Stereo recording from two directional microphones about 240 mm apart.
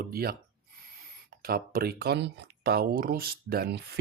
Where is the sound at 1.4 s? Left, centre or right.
Right.